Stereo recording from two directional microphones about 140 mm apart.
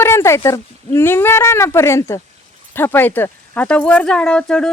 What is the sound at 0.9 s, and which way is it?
Speech, 15° left (ahead or behind).